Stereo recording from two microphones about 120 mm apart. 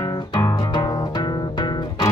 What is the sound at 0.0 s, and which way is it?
Music, 40° left (ahead or behind).